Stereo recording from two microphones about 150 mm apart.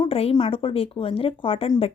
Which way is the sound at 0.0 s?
40° left (ahead or behind).